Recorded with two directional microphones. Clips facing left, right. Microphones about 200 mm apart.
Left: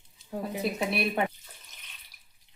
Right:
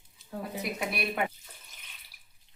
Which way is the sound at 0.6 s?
30° left (ahead or behind).